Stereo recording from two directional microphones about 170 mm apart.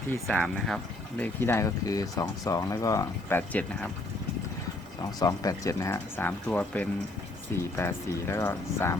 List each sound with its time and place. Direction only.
0.3 s speech: 5° left (ahead or behind)
5.2 s speech: 20° left (ahead or behind)